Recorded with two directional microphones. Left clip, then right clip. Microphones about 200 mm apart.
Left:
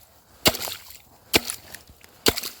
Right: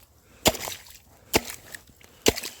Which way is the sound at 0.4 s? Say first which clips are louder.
Left 2 dB; 20° left (ahead or behind).